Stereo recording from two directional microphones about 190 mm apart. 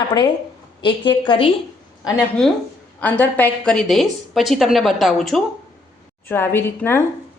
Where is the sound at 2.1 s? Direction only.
5° left (ahead or behind).